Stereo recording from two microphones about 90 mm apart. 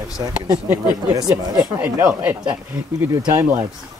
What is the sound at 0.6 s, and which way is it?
Speech, 20° right (ahead or behind).